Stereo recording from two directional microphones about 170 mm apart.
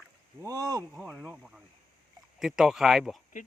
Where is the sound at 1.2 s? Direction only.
5° right (ahead or behind).